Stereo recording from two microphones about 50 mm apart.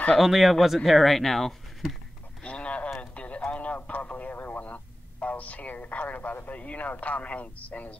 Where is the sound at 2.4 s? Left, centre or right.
Left.